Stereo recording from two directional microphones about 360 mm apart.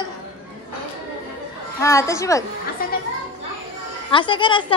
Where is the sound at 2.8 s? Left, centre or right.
Left.